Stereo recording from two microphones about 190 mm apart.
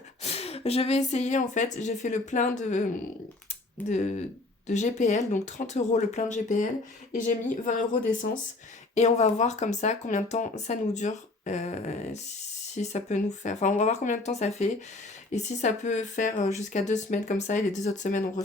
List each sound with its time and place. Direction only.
0.2 s speech: 35° left (ahead or behind)
3.8 s speech: 35° left (ahead or behind)